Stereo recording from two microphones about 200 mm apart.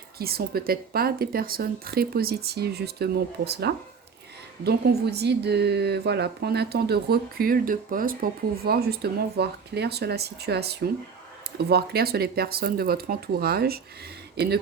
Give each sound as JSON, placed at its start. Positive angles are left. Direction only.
{"t": 0.2, "sound": "speech", "side_deg": -50}